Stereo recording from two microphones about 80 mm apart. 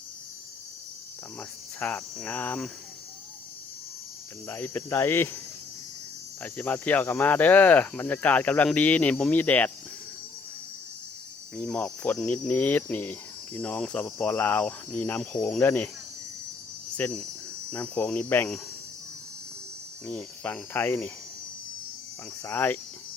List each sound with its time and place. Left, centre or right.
1.4 s speech: left
4.4 s speech: left
6.4 s speech: centre
11.5 s cricket: centre
15.6 s speech: left
17.0 s speech: left
20.1 s speech: centre
22.4 s speech: left